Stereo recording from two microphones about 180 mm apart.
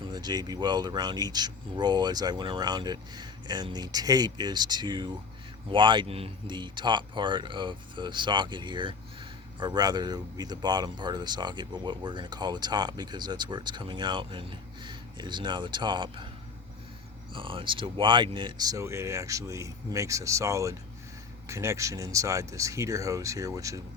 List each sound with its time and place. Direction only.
0.1 s speech: 25° right (ahead or behind)
17.3 s speech: 30° right (ahead or behind)